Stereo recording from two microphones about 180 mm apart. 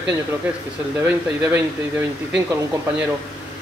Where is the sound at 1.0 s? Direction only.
10° right (ahead or behind).